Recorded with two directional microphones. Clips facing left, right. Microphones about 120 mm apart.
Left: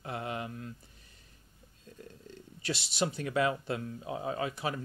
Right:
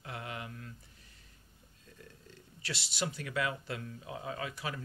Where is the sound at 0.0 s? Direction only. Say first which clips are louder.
Left 6 dB; 30° left (ahead or behind).